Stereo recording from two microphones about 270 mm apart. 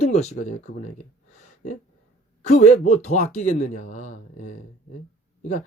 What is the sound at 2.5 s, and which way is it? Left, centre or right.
Speech, left.